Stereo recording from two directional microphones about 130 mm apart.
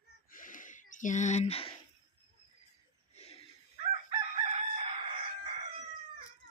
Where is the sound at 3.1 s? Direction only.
55° left (ahead or behind).